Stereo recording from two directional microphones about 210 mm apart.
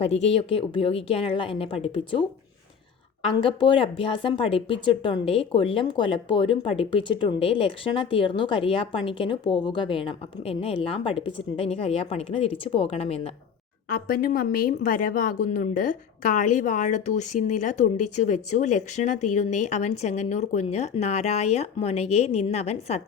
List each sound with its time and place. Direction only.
0.0 s speech: 30° left (ahead or behind)
3.2 s speech: 25° left (ahead or behind)
13.9 s a woman's voice: 45° left (ahead or behind)